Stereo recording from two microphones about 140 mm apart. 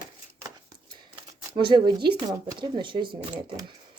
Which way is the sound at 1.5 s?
35° right (ahead or behind).